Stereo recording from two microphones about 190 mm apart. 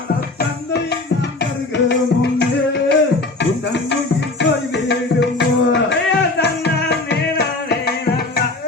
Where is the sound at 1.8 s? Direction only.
65° left (ahead or behind).